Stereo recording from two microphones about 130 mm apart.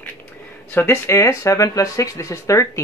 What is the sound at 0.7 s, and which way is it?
Speech, 20° left (ahead or behind).